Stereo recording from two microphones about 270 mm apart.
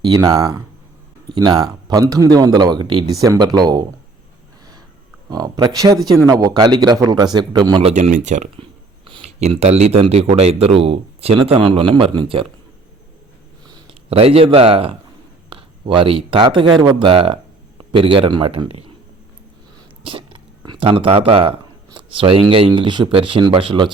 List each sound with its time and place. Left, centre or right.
0.0 s speech: centre
5.3 s speech: centre
13.7 s a man's voice: right
20.1 s speech: centre